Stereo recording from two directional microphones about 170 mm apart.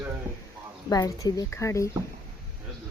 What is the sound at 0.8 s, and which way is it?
A woman's voice, 20° left (ahead or behind).